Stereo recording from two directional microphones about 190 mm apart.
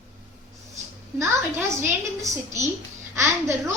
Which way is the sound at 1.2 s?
10° right (ahead or behind).